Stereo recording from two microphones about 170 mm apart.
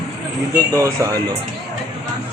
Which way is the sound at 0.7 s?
15° right (ahead or behind).